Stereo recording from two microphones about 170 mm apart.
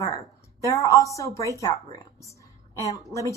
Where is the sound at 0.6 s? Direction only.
20° left (ahead or behind).